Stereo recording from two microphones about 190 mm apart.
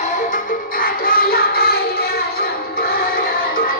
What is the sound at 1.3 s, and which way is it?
Music, 55° left (ahead or behind).